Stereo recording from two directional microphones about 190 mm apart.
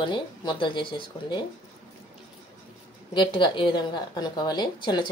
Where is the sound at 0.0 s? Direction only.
25° left (ahead or behind).